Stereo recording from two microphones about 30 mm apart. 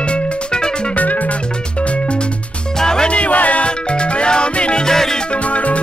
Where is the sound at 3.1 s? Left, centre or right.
Left.